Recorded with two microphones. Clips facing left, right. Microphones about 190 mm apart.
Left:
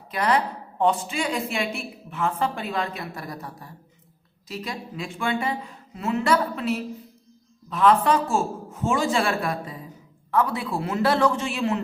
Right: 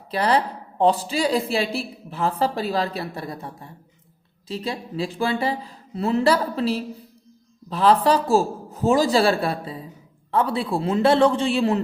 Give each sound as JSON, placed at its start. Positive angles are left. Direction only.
{"t": 0.1, "sound": "a woman's voice", "side_deg": -30}